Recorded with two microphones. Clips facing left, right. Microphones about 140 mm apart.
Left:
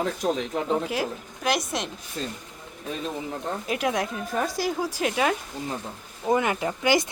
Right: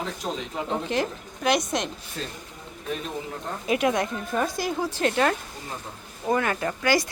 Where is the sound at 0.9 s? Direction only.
5° left (ahead or behind).